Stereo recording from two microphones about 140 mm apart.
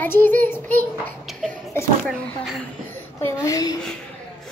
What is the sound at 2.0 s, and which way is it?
Speech, centre (ahead or behind).